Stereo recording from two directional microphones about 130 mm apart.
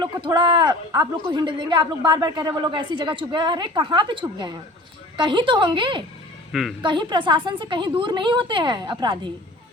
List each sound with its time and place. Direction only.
0.0 s speech: 35° right (ahead or behind)
6.5 s a woman's voice: centre (ahead or behind)
6.8 s speech: 35° right (ahead or behind)